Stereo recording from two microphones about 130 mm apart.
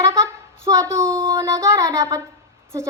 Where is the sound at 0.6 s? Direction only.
25° right (ahead or behind).